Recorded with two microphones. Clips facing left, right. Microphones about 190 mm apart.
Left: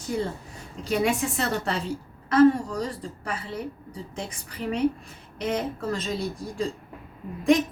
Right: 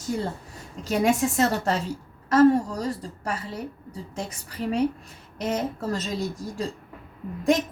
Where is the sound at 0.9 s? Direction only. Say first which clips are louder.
Right 2 dB; 40° right (ahead or behind).